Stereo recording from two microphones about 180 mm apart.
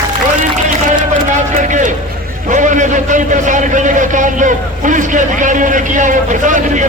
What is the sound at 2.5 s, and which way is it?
A man's voice, 45° right (ahead or behind).